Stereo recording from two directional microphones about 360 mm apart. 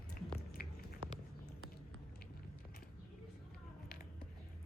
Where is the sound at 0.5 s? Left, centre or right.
Left.